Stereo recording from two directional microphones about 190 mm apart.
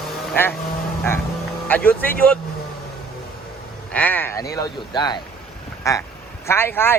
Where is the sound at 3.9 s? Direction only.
10° left (ahead or behind).